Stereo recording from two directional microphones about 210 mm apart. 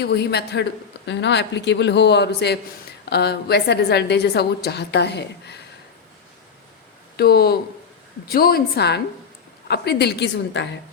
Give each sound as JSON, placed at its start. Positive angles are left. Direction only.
{"t": 0.0, "sound": "a man's voice", "side_deg": 50}
{"t": 7.2, "sound": "a woman's voice", "side_deg": 50}